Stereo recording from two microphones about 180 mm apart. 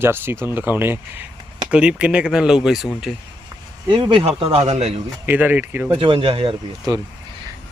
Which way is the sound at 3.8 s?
25° right (ahead or behind).